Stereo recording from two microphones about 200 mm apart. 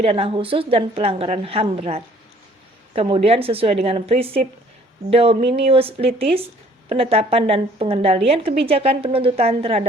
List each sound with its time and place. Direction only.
0.0 s a woman's voice: 30° right (ahead or behind)